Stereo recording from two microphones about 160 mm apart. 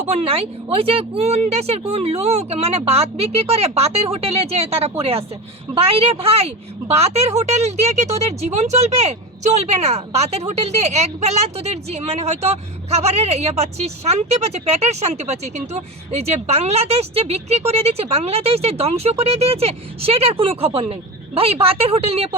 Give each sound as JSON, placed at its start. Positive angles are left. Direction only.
{"t": 0.1, "sound": "speech", "side_deg": -40}